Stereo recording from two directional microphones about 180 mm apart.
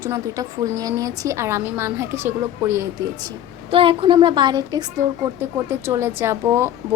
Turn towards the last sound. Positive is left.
turn(degrees=-15)  # may be behind; listen again after turning